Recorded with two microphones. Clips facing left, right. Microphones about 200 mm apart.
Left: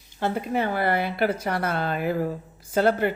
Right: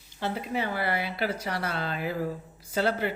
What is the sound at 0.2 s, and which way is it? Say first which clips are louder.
Speech: left 5 dB; 50° left (ahead or behind).